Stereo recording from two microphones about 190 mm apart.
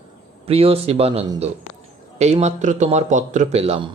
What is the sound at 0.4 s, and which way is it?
Speech, 30° right (ahead or behind).